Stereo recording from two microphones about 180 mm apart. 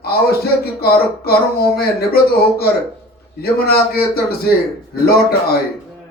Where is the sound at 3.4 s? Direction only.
60° left (ahead or behind).